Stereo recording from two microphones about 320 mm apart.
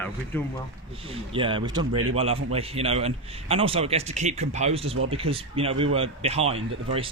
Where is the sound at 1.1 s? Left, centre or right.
Centre.